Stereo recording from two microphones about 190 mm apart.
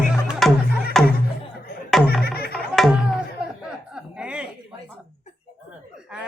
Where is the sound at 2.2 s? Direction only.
55° left (ahead or behind).